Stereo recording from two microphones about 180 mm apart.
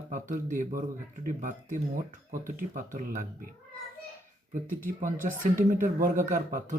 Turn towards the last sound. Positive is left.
turn(degrees=-45)  # may be behind; listen again after turning